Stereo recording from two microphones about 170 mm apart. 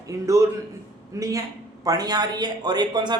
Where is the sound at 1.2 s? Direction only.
20° right (ahead or behind).